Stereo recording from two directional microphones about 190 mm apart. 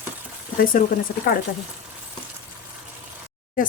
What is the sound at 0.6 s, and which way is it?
Speech, 45° left (ahead or behind).